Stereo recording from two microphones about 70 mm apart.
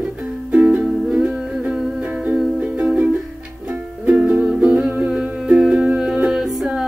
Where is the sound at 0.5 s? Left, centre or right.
Centre.